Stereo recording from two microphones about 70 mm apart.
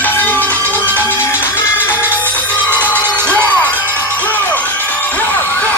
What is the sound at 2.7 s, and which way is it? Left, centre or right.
Music, left.